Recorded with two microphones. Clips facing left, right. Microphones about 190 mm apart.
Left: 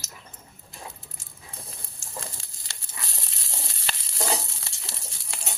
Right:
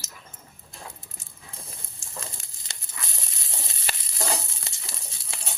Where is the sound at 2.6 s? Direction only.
20° right (ahead or behind).